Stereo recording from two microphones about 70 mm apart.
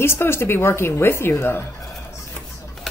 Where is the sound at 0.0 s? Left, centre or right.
Left.